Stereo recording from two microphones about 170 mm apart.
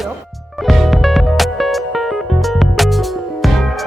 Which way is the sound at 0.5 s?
Centre (ahead or behind).